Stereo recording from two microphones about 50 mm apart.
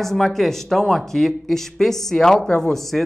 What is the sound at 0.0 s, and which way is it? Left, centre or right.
A man's voice, centre.